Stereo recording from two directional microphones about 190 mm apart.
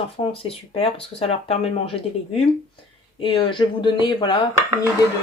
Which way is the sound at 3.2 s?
30° left (ahead or behind).